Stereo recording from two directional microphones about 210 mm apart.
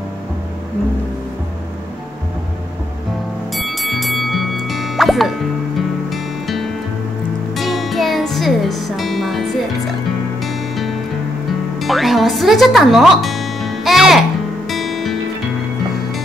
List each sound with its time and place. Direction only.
3.5 s music: centre (ahead or behind)